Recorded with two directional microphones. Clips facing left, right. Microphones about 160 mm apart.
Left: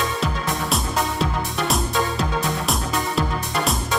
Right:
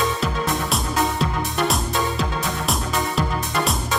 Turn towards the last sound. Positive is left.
turn(degrees=0)  # may be behind; listen again after turning